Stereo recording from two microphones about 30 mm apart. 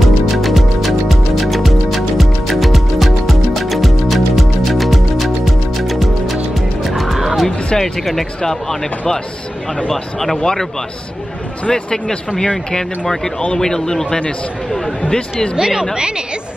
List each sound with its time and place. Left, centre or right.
0.0 s music: centre
7.4 s music: centre
8.0 s speech: centre
11.7 s speech: left
15.0 s speech: left
15.5 s a woman's voice: right
16.0 s a woman's voice: right